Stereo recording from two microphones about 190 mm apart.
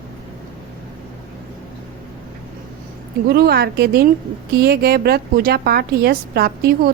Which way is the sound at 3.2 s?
55° right (ahead or behind).